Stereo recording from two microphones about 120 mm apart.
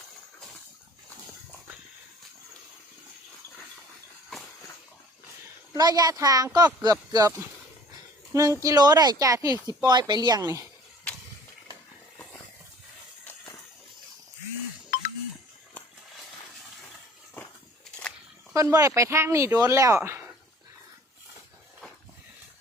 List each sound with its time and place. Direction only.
5.7 s speech: 30° right (ahead or behind)
18.5 s speech: 25° right (ahead or behind)